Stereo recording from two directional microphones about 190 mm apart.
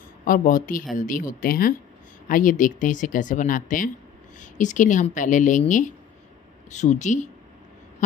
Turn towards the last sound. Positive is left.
turn(degrees=40)  # may be behind; listen again after turning